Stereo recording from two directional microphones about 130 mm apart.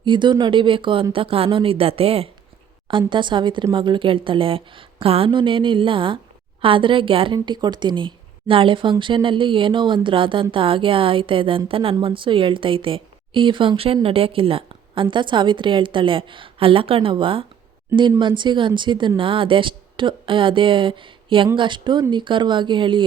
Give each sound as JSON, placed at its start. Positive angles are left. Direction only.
{"t": 0.0, "sound": "a woman's voice", "side_deg": -35}